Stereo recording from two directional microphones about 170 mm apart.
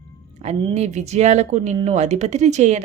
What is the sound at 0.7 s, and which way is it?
Speech, 40° right (ahead or behind).